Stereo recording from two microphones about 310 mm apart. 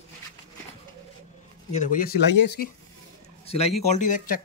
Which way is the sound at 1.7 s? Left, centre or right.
Left.